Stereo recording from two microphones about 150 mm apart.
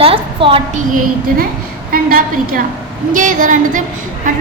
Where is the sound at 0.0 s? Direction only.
35° right (ahead or behind).